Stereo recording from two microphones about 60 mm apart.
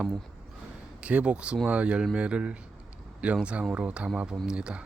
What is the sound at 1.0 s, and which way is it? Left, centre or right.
Speech, centre.